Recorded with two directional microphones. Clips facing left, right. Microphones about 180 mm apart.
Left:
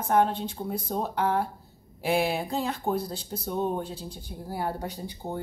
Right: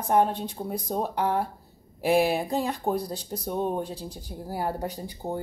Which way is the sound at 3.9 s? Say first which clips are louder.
Right 2 dB; 40° right (ahead or behind).